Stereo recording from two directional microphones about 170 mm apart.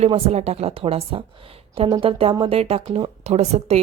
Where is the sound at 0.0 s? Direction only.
40° right (ahead or behind).